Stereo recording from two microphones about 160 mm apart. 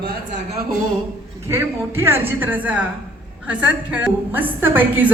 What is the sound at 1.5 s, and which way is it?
A woman's voice, 15° right (ahead or behind).